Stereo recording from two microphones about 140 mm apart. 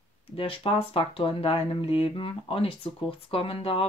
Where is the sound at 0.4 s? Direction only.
40° left (ahead or behind).